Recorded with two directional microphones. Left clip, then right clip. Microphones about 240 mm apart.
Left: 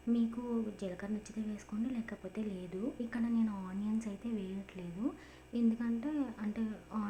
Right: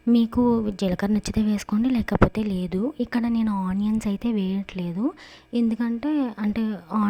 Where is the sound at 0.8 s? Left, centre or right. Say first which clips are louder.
Right 16 dB; right.